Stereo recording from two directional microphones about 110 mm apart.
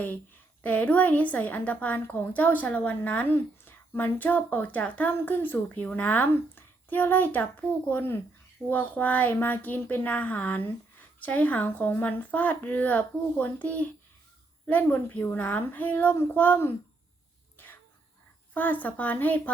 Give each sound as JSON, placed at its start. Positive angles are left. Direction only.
{"t": 0.6, "sound": "a woman's voice", "side_deg": 15}
{"t": 18.5, "sound": "a woman's voice", "side_deg": 15}